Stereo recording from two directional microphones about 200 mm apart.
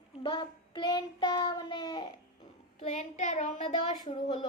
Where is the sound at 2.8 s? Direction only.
35° left (ahead or behind).